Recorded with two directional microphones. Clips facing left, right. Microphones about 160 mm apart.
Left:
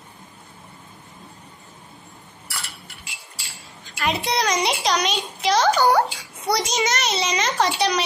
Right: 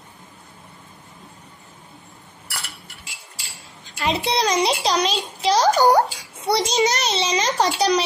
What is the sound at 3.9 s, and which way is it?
A child's voice, 30° right (ahead or behind).